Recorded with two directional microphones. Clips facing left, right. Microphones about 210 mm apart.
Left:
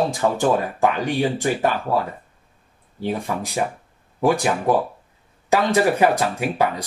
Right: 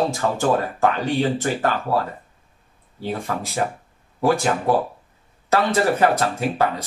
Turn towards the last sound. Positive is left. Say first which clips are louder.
# even
turn(degrees=15)  # may be behind; listen again after turning